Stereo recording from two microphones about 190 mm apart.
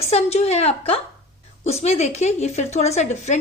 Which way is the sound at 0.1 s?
35° left (ahead or behind).